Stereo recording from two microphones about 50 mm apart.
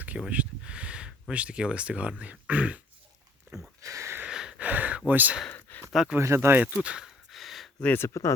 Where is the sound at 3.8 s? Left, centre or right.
Right.